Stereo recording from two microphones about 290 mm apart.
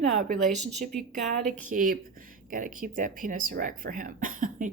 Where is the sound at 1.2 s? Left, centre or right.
Centre.